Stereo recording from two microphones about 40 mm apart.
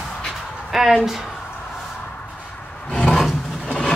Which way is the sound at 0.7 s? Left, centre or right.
Centre.